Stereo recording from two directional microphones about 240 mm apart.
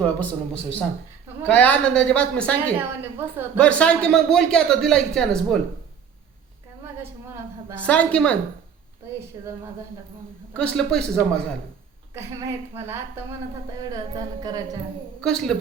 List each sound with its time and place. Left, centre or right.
0.0 s a man's voice: centre
2.7 s a woman's voice: centre
3.6 s a man's voice: centre
7.9 s a man's voice: centre
9.4 s a woman's voice: centre
10.5 s a man's voice: centre
12.1 s a woman's voice: centre
15.2 s a man's voice: centre